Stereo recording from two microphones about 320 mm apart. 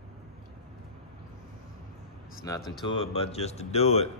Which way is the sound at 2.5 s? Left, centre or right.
Centre.